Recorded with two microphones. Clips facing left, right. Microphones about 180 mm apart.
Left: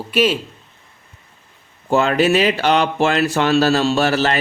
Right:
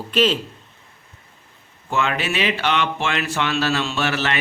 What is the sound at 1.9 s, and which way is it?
Speech, 35° left (ahead or behind).